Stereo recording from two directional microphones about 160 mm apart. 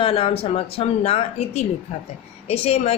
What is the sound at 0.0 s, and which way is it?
A woman's voice, 35° left (ahead or behind).